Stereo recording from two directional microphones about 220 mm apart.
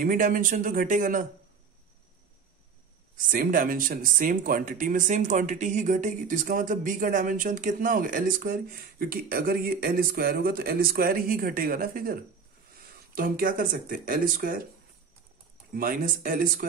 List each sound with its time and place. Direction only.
0.0 s speech: 40° right (ahead or behind)
3.2 s speech: 40° right (ahead or behind)
15.7 s speech: 40° right (ahead or behind)